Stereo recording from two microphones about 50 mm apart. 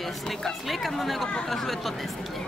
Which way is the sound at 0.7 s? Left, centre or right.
Centre.